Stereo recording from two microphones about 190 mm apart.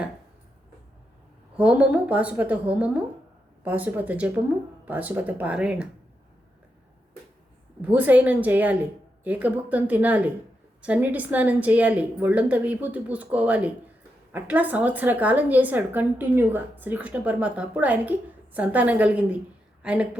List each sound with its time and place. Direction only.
1.5 s a woman's voice: 5° right (ahead or behind)
7.8 s a woman's voice: 10° right (ahead or behind)